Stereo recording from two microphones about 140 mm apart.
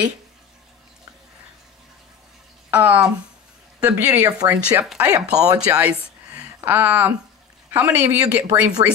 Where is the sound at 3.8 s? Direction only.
20° right (ahead or behind).